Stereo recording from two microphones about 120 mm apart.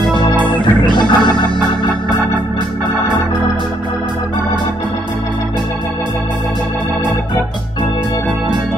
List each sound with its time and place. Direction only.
0.4 s music: 40° left (ahead or behind)